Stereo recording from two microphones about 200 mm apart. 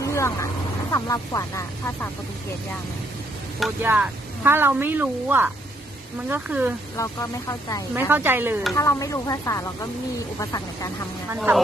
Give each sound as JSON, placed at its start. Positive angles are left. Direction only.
{"t": 0.0, "sound": "vehicle", "side_deg": 15}
{"t": 0.9, "sound": "speech", "side_deg": 15}
{"t": 3.8, "sound": "a woman's voice", "side_deg": -10}
{"t": 6.9, "sound": "speech", "side_deg": 15}
{"t": 7.9, "sound": "a woman's voice", "side_deg": -10}
{"t": 8.7, "sound": "speech", "side_deg": 15}
{"t": 11.3, "sound": "speech", "side_deg": -5}